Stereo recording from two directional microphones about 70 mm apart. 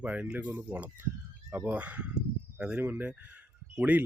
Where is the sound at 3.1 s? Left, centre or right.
Right.